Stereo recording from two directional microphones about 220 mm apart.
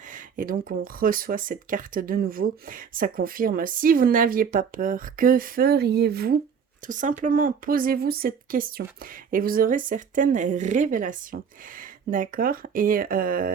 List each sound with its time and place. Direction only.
0.1 s speech: 40° right (ahead or behind)